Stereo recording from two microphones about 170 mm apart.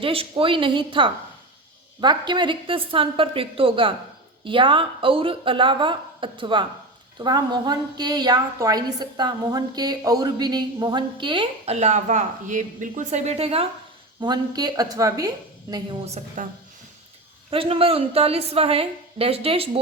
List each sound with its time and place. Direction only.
0.0 s a woman's voice: 30° right (ahead or behind)
14.2 s a woman's voice: 25° right (ahead or behind)
16.0 s a woman's voice: 45° right (ahead or behind)
17.5 s a woman's voice: 35° right (ahead or behind)